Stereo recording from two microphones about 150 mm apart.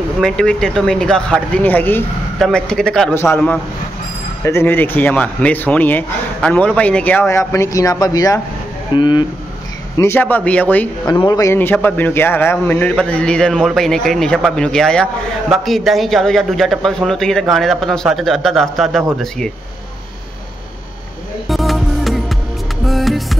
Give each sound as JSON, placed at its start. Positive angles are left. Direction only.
{"t": 0.2, "sound": "a man's voice", "side_deg": 5}
{"t": 2.3, "sound": "a man's voice", "side_deg": 5}
{"t": 9.9, "sound": "a man's voice", "side_deg": 15}
{"t": 11.1, "sound": "a man's voice", "side_deg": 25}
{"t": 21.5, "sound": "music", "side_deg": 0}